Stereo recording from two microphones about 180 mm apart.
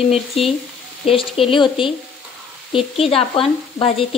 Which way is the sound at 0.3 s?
30° left (ahead or behind).